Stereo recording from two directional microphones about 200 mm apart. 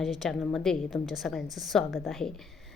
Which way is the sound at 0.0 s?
Centre (ahead or behind).